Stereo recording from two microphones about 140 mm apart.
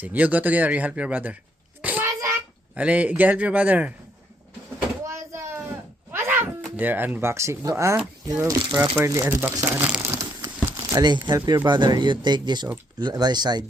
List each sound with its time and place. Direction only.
0.0 s speech: 10° right (ahead or behind)
1.8 s child singing: 10° right (ahead or behind)
2.7 s speech: 10° right (ahead or behind)
5.0 s a sound: 20° right (ahead or behind)
6.1 s speech: 15° right (ahead or behind)
10.2 s crumpling: 20° right (ahead or behind)
11.0 s speech: 30° right (ahead or behind)